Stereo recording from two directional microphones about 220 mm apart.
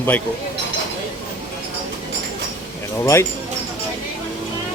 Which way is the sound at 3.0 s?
10° left (ahead or behind).